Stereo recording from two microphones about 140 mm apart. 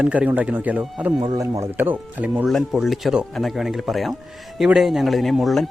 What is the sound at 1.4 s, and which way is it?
Speech, 20° right (ahead or behind).